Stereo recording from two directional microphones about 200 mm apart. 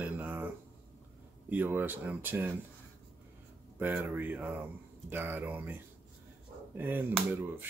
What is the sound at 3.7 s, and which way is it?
Speech, 10° right (ahead or behind).